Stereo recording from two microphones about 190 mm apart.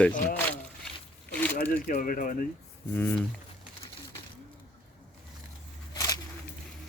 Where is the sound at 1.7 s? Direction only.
45° left (ahead or behind).